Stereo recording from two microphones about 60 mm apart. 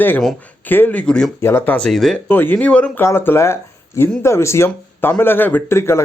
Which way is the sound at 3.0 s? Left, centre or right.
Left.